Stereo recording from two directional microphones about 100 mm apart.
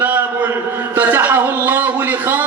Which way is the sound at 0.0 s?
20° right (ahead or behind).